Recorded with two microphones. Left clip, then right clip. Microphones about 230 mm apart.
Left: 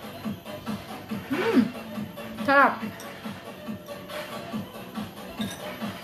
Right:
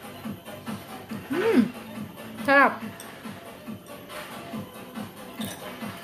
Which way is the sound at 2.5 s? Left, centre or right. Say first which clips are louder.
Right 1 dB; right.